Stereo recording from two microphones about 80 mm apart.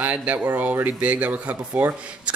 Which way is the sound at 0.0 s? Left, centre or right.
Centre.